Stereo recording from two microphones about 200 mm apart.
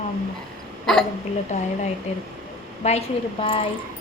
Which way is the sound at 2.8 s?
35° left (ahead or behind).